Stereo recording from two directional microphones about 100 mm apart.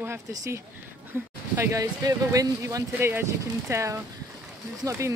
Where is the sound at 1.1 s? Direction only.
25° right (ahead or behind).